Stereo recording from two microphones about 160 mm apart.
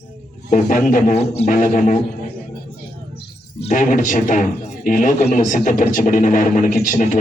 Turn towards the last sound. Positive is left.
turn(degrees=55)  # may be behind; listen again after turning